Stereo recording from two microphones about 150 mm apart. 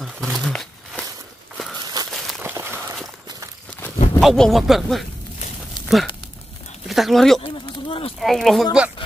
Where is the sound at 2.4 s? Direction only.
15° right (ahead or behind).